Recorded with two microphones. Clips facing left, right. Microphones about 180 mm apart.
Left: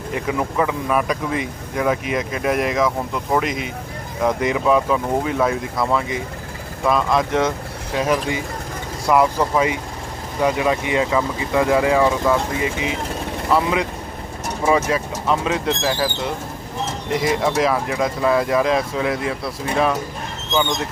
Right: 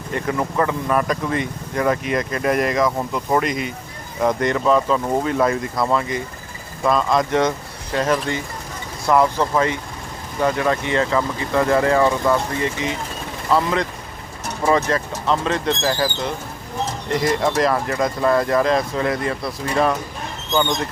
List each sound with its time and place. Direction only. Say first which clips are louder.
0.1 s speech: even; 5° left (ahead or behind)